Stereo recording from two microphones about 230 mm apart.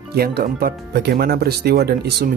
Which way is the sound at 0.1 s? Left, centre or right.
Right.